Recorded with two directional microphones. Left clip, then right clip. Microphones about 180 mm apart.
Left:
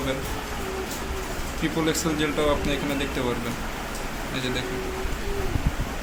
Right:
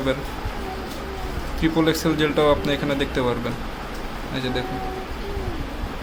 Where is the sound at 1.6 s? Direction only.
40° right (ahead or behind).